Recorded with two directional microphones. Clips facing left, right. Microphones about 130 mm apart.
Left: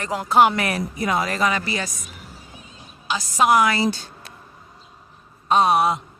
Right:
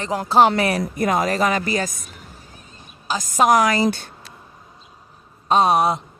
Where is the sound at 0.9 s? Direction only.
45° right (ahead or behind).